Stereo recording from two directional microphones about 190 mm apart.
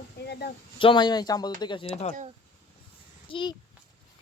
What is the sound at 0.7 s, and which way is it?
Speech, 25° left (ahead or behind).